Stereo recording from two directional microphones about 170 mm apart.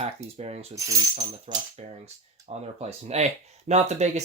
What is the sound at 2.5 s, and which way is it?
Speech, 35° right (ahead or behind).